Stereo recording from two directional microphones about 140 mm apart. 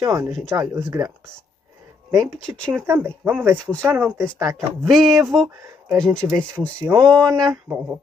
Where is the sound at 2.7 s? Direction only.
15° right (ahead or behind).